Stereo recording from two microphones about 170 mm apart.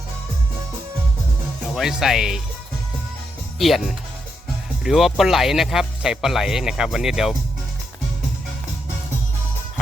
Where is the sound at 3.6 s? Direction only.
Centre (ahead or behind).